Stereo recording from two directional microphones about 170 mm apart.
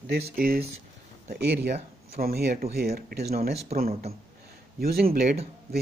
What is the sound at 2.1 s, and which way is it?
Speech, 65° right (ahead or behind).